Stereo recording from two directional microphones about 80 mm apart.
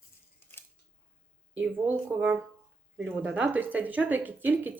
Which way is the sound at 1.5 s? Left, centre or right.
Right.